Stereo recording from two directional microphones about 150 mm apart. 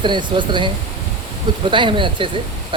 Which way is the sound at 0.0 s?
30° right (ahead or behind).